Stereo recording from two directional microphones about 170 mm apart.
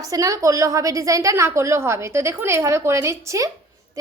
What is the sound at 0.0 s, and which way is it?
A woman's voice, 20° right (ahead or behind).